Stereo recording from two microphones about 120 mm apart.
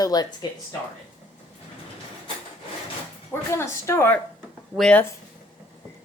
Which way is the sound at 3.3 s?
20° left (ahead or behind).